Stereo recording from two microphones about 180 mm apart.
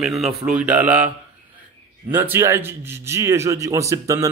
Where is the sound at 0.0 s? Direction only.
Centre (ahead or behind).